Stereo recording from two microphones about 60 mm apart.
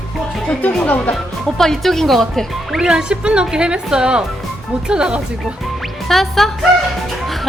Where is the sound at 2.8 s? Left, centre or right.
Centre.